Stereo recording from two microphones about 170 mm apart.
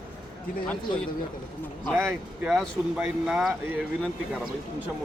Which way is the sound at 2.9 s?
5° right (ahead or behind).